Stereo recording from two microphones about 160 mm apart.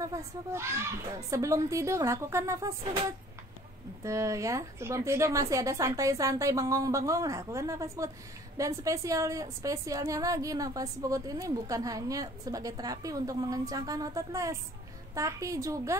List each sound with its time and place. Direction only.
0.0 s a woman's voice: 20° right (ahead or behind)
4.0 s a woman's voice: 20° right (ahead or behind)